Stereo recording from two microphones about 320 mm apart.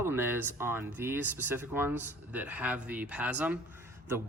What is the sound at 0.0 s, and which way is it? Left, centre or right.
Speech, centre.